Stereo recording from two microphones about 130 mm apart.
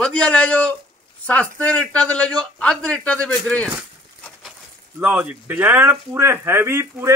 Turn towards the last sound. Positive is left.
turn(degrees=-20)  # may be behind; listen again after turning